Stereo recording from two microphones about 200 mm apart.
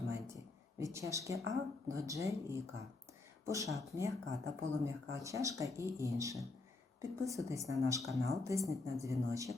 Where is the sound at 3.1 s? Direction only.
15° right (ahead or behind).